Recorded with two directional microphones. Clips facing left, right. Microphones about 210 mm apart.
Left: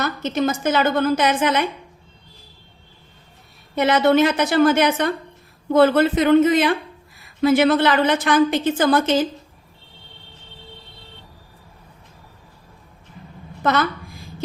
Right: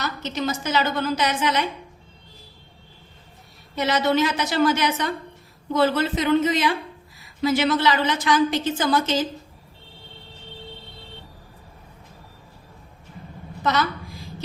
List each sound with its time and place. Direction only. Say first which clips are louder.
0.0 s a woman's voice: left 6 dB; 50° left (ahead or behind)
3.8 s a woman's voice: left 5 dB; 55° left (ahead or behind)
13.6 s a woman's voice: left 3 dB; 55° left (ahead or behind)